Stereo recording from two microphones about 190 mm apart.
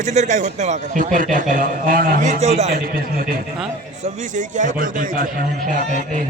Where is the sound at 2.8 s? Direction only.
50° right (ahead or behind).